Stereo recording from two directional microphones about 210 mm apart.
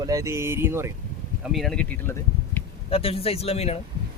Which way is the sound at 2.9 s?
25° left (ahead or behind).